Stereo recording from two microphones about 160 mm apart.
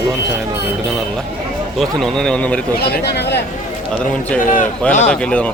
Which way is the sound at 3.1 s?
90° left.